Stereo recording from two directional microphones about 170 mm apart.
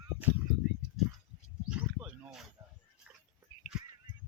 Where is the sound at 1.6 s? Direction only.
5° right (ahead or behind).